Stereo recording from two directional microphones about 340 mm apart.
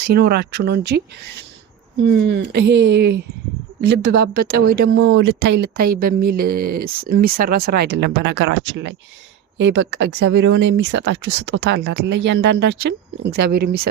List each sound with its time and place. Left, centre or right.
0.1 s speech: right
2.0 s speech: right